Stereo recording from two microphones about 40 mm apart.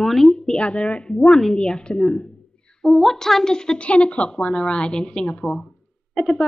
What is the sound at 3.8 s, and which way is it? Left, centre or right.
A woman's voice, left.